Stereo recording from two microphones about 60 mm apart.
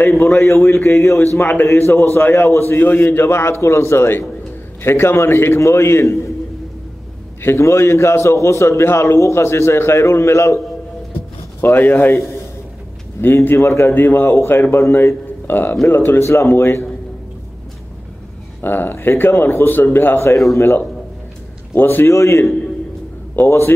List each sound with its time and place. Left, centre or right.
0.2 s a man's voice: left
3.3 s a man's voice: left
7.5 s a man's voice: left
11.6 s a man's voice: left
13.2 s a man's voice: left
18.6 s a man's voice: left
20.2 s speech: left
21.7 s a man's voice: left